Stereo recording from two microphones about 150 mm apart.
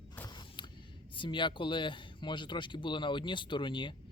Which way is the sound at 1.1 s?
30° left (ahead or behind).